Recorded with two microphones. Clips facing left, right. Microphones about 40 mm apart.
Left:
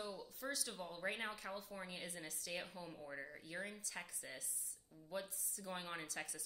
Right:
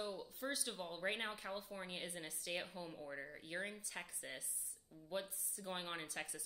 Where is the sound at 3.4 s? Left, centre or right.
Right.